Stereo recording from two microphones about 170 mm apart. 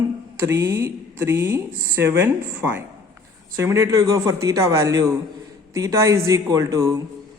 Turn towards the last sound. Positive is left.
turn(degrees=-20)  # may be behind; listen again after turning